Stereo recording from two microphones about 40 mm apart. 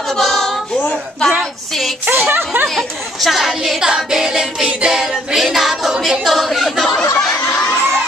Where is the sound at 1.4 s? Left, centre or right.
Centre.